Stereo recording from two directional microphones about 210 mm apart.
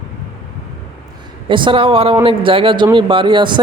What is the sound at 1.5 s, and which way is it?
Speech, 25° right (ahead or behind).